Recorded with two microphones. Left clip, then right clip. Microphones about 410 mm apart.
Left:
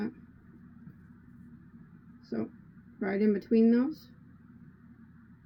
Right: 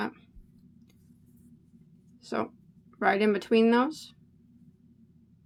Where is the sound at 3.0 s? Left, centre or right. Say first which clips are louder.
Right 5 dB; right.